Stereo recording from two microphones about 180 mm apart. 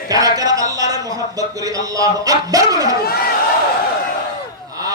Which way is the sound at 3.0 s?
60° left (ahead or behind).